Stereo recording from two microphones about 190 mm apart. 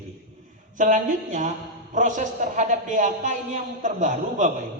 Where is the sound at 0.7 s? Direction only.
40° right (ahead or behind).